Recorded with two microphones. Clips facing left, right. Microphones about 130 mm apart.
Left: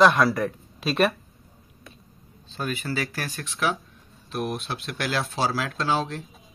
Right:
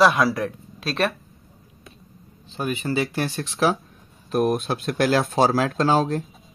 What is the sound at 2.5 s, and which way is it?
Speech, 15° right (ahead or behind).